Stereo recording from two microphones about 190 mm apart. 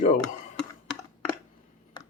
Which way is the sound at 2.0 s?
25° left (ahead or behind).